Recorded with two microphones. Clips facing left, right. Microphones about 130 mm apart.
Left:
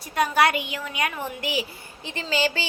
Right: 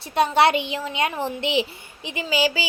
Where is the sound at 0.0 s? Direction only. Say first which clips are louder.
Right 3 dB; 25° right (ahead or behind).